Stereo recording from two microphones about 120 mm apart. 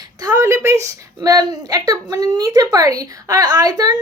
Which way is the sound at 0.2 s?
25° right (ahead or behind).